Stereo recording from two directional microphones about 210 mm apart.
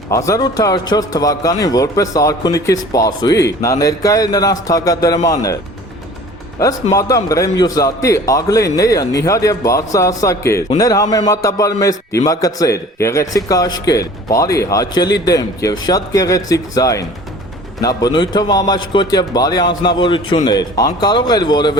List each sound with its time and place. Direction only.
0.1 s a man's voice: 15° left (ahead or behind)
6.9 s a man's voice: 15° left (ahead or behind)